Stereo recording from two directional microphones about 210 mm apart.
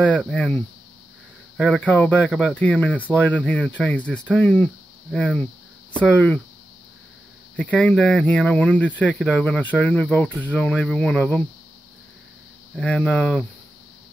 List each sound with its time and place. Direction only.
0.0 s speech: 5° left (ahead or behind)
1.6 s speech: 5° left (ahead or behind)
7.5 s speech: 5° left (ahead or behind)
12.7 s speech: 5° left (ahead or behind)